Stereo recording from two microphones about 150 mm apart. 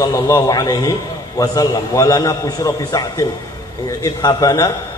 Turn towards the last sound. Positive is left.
turn(degrees=25)  # may be behind; listen again after turning